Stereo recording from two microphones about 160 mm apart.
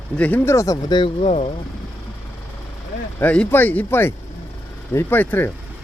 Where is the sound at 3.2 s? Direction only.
10° left (ahead or behind).